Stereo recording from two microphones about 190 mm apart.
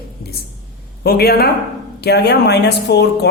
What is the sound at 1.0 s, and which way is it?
Speech, 55° left (ahead or behind).